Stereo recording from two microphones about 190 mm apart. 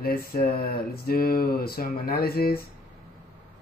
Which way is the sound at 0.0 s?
55° left (ahead or behind).